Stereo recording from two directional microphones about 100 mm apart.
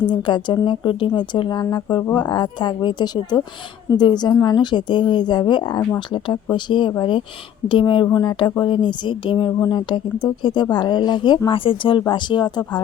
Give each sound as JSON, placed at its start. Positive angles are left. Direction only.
{"t": 0.1, "sound": "speech", "side_deg": 50}
{"t": 11.4, "sound": "speech", "side_deg": 60}